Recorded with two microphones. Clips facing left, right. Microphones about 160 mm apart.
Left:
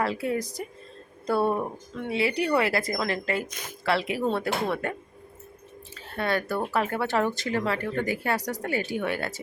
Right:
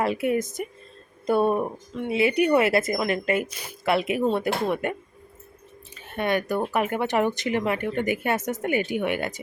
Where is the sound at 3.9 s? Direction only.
20° right (ahead or behind).